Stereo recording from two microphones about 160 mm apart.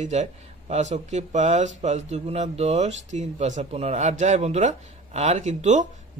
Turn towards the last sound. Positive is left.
turn(degrees=-45)  # may be behind; listen again after turning